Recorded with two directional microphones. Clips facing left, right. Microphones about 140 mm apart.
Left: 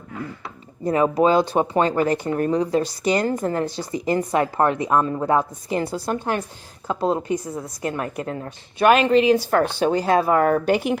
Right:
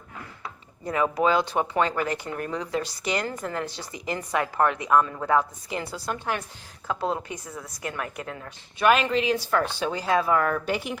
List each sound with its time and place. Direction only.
0.9 s speech: 30° left (ahead or behind)
5.6 s speech: 45° left (ahead or behind)
8.8 s speech: 50° left (ahead or behind)